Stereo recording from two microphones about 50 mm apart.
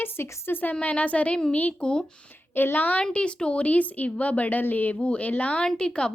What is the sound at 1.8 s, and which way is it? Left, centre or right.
Speech, centre.